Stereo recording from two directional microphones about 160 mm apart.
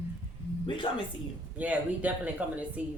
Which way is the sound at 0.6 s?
30° left (ahead or behind).